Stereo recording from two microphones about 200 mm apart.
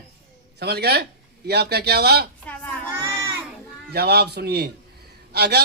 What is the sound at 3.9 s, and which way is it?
A man's voice, 55° right (ahead or behind).